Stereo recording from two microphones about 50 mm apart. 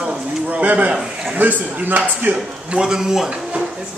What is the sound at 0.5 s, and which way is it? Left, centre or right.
A man's voice, right.